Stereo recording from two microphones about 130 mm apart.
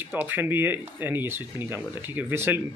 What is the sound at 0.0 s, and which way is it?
Speech, 15° right (ahead or behind).